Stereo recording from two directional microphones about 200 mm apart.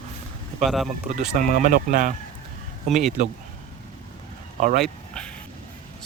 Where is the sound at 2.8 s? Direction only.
Centre (ahead or behind).